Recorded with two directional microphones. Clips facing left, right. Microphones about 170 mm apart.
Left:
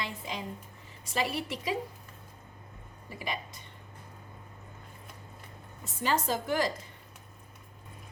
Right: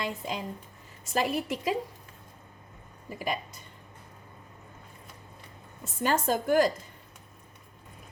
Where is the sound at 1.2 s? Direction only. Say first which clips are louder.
Right 4 dB; 45° right (ahead or behind).